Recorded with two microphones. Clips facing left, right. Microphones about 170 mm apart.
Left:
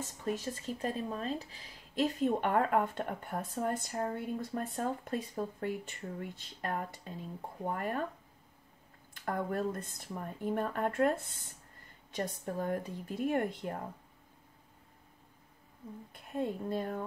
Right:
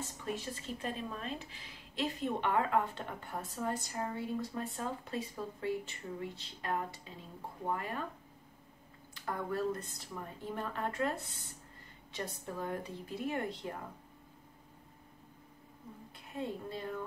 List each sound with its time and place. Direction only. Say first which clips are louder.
0.0 s speech: left 4 dB; 45° left (ahead or behind)
9.1 s speech: left 3 dB; 50° left (ahead or behind)
16.1 s a woman's voice: left 4 dB; 50° left (ahead or behind)